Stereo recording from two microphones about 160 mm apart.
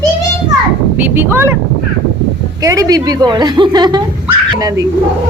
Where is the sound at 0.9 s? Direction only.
10° right (ahead or behind).